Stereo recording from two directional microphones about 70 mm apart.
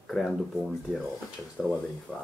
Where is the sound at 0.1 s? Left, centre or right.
Centre.